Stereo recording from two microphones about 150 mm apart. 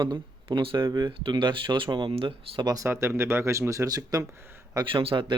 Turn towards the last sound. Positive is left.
turn(degrees=-35)  # may be behind; listen again after turning